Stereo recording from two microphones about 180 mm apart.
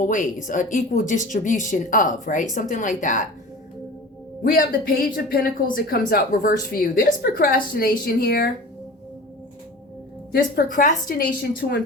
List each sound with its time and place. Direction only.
0.0 s speech: 45° left (ahead or behind)
4.4 s a woman's voice: 55° left (ahead or behind)
10.3 s speech: 50° left (ahead or behind)